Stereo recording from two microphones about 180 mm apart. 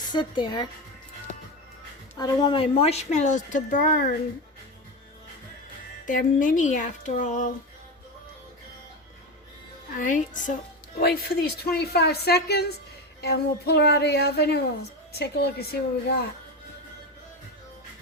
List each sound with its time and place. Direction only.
0.1 s speech: 25° left (ahead or behind)
2.1 s a woman's voice: 20° left (ahead or behind); by 4.1 s 50° left (ahead or behind)
6.1 s speech: 50° left (ahead or behind)
10.0 s speech: 45° left (ahead or behind)
11.0 s a woman's voice: 60° left (ahead or behind)